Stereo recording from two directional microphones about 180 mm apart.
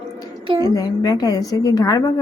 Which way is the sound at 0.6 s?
20° left (ahead or behind).